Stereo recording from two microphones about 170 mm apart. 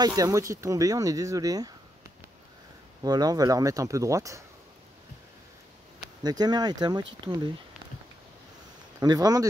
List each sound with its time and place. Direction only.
0.0 s speech: 20° right (ahead or behind)
3.0 s speech: 25° right (ahead or behind)
6.2 s speech: 25° right (ahead or behind)
9.0 s speech: 20° right (ahead or behind)